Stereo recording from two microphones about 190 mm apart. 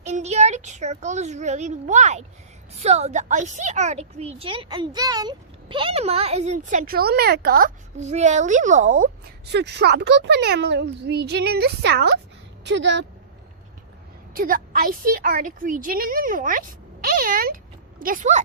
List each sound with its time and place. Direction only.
0.0 s a woman's voice: 35° right (ahead or behind); by 7.7 s 50° right (ahead or behind)
7.9 s a woman's voice: 35° right (ahead or behind)
9.5 s speech: 60° right (ahead or behind)
14.3 s a woman's voice: 50° right (ahead or behind)